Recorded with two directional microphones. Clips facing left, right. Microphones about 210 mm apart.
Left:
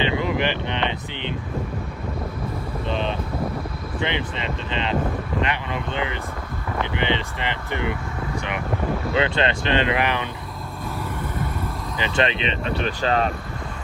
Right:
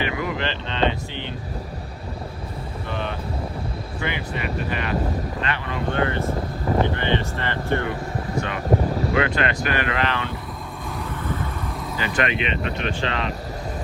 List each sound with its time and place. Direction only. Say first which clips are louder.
0.0 s speech: left 3 dB; 20° left (ahead or behind)
2.8 s speech: left 3 dB; 20° left (ahead or behind)
6.3 s vehicle: right 6 dB; 35° right (ahead or behind)
6.9 s speech: even; 15° left (ahead or behind)
8.7 s speech: right 8 dB; 40° right (ahead or behind)
9.1 s speech: left 2 dB; 25° left (ahead or behind)
11.9 s speech: left 1 dB; 20° left (ahead or behind); by 13.3 s 40° left (ahead or behind)